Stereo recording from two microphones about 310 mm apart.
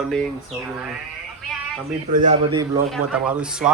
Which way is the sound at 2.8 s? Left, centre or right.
Centre.